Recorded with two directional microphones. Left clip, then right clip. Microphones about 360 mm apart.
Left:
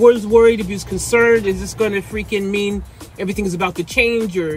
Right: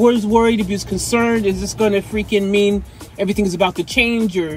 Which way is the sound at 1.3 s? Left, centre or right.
Centre.